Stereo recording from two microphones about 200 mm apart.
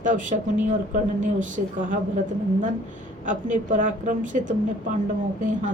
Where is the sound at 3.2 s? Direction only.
40° right (ahead or behind).